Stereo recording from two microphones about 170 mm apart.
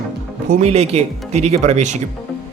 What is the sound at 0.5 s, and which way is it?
Speech, 40° right (ahead or behind).